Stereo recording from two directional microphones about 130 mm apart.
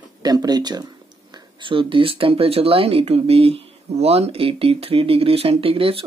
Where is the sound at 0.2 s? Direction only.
30° right (ahead or behind).